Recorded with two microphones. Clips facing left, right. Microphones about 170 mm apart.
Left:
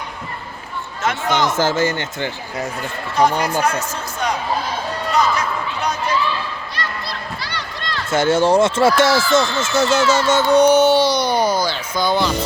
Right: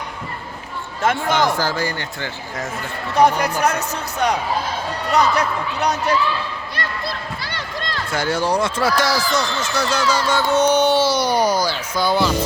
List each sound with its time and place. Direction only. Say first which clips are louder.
1.3 s speech: left 1 dB; 20° left (ahead or behind)
3.8 s a man's voice: right 2 dB; 65° right (ahead or behind)
6.7 s run: right 2 dB; 50° right (ahead or behind)
8.1 s speech: left 6 dB; 25° left (ahead or behind); by 12.3 s 10° right (ahead or behind)